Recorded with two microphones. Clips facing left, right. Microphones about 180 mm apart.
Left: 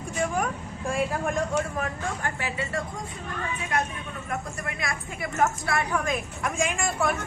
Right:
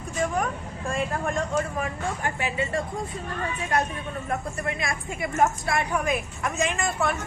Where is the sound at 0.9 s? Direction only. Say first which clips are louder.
Left 1 dB; 5° left (ahead or behind).